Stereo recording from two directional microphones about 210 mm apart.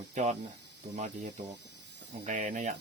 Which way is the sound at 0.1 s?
35° right (ahead or behind).